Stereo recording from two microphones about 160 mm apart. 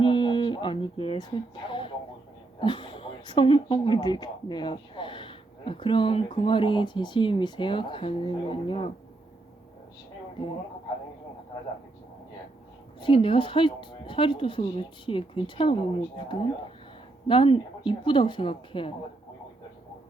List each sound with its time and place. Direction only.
0.0 s a sound: 30° left (ahead or behind)
2.6 s speech: 30° left (ahead or behind)
13.0 s speech: 35° left (ahead or behind)